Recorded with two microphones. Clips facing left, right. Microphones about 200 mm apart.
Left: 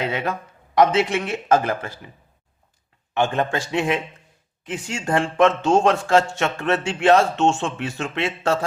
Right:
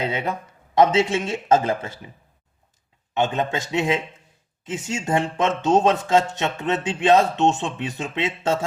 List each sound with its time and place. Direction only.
0.1 s a man's voice: 20° right (ahead or behind)
3.2 s a man's voice: 20° right (ahead or behind)